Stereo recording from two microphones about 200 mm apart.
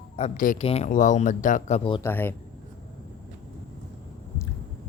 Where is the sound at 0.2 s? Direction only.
40° left (ahead or behind).